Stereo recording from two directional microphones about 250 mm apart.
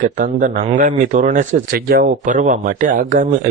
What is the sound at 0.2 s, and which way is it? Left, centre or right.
A man's voice, right.